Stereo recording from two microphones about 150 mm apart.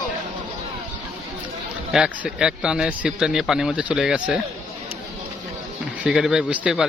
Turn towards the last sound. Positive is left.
turn(degrees=-5)  # may be behind; listen again after turning